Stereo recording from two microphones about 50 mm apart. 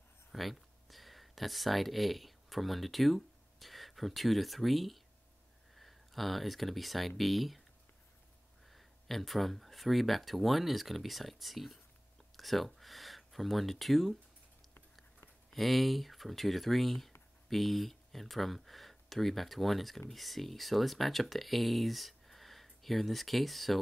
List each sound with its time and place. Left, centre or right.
0.3 s speech: centre
8.6 s speech: centre
15.5 s speech: centre